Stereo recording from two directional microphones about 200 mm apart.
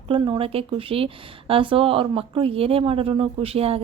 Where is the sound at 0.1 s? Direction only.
25° right (ahead or behind).